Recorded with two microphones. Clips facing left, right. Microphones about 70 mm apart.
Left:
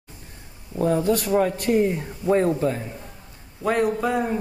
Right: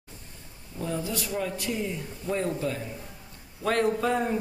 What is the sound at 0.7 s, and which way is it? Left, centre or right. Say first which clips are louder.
A man's voice: left 11 dB; left.